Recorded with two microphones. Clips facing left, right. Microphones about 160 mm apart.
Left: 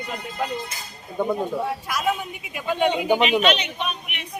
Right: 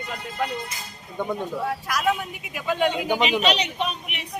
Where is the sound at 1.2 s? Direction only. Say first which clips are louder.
Left 3 dB; 5° left (ahead or behind).